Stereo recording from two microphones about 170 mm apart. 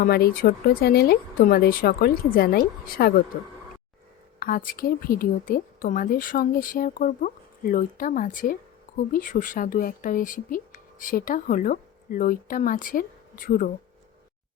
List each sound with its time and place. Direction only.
0.0 s speech: 65° left (ahead or behind)
4.4 s speech: 60° left (ahead or behind)